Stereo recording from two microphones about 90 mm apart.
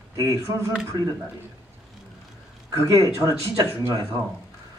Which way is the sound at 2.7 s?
40° right (ahead or behind).